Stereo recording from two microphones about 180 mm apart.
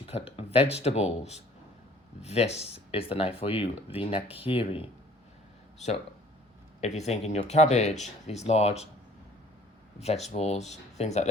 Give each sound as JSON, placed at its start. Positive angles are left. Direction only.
{"t": 0.3, "sound": "speech", "side_deg": 35}
{"t": 6.8, "sound": "speech", "side_deg": 40}
{"t": 10.2, "sound": "speech", "side_deg": 35}